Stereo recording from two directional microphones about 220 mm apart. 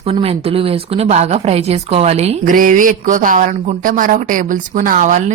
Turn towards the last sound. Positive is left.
turn(degrees=-35)  # may be behind; listen again after turning